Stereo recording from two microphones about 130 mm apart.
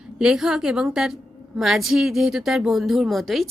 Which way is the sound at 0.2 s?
5° right (ahead or behind).